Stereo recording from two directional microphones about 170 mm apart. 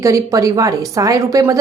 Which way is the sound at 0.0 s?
20° right (ahead or behind).